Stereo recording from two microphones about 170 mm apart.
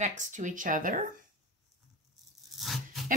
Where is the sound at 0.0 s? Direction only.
45° right (ahead or behind).